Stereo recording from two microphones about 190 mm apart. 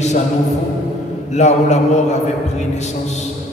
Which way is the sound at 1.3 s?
35° left (ahead or behind).